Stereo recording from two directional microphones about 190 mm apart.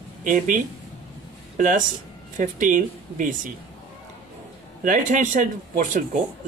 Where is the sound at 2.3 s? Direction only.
45° right (ahead or behind).